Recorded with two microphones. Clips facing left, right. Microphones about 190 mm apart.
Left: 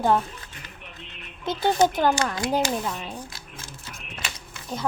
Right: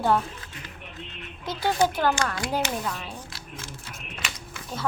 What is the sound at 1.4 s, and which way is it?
Speech, 20° left (ahead or behind).